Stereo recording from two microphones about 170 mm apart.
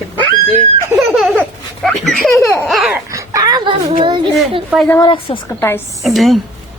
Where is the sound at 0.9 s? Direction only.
Centre (ahead or behind).